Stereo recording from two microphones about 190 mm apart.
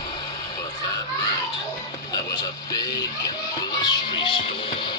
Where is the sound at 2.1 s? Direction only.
20° left (ahead or behind).